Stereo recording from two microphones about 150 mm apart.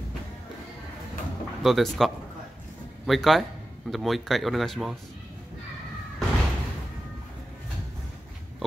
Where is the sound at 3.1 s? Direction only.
Centre (ahead or behind).